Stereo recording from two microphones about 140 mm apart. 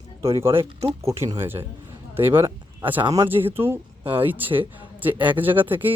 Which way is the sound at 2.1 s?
15° right (ahead or behind).